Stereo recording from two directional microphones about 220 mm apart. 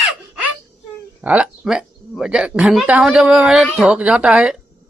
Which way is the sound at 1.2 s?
5° right (ahead or behind).